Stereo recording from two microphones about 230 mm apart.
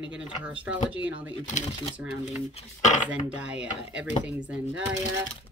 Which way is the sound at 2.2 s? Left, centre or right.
Left.